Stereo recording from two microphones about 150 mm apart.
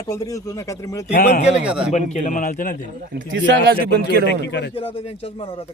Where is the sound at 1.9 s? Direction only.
50° left (ahead or behind).